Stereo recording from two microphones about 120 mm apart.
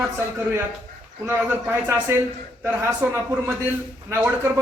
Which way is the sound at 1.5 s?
20° right (ahead or behind).